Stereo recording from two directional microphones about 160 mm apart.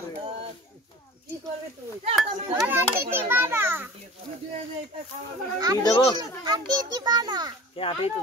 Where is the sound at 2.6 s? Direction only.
15° right (ahead or behind).